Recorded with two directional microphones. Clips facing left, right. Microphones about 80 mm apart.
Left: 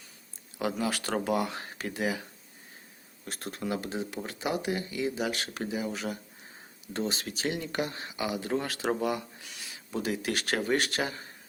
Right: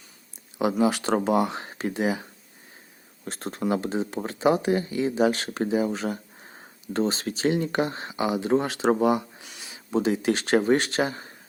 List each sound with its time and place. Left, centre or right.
0.6 s speech: right
3.2 s speech: right